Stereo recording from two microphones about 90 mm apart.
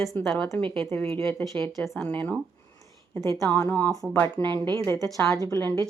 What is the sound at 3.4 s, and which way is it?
Speech, 35° left (ahead or behind).